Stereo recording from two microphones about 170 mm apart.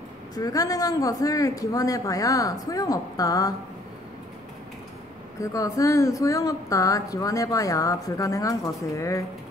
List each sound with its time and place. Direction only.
0.3 s a woman's voice: 20° left (ahead or behind)
5.4 s a woman's voice: 20° left (ahead or behind)